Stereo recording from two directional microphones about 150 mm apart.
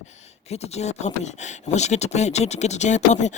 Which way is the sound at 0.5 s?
45° left (ahead or behind).